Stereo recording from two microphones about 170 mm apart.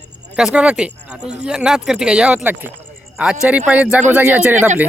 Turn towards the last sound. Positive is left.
turn(degrees=-10)  # may be behind; listen again after turning